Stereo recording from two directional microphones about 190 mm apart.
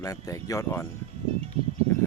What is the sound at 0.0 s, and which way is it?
Speech, 15° left (ahead or behind).